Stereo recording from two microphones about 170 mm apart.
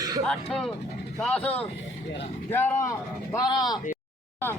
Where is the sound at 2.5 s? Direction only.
15° left (ahead or behind).